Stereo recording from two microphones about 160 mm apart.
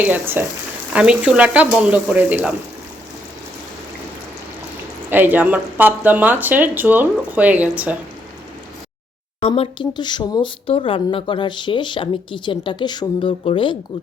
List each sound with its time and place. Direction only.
0.0 s speech: 10° right (ahead or behind)
5.0 s speech: 10° right (ahead or behind)
9.4 s speech: 35° left (ahead or behind)